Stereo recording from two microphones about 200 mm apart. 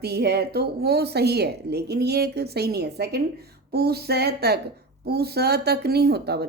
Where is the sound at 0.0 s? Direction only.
55° right (ahead or behind).